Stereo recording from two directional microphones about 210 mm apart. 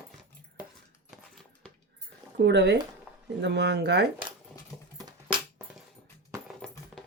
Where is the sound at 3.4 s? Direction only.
55° right (ahead or behind).